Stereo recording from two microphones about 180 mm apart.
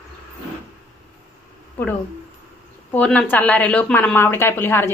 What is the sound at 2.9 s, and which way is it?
Speech, 10° left (ahead or behind).